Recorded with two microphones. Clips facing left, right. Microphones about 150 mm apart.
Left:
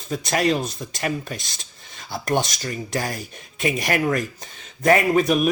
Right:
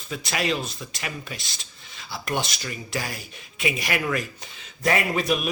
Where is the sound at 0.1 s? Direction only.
45° left (ahead or behind).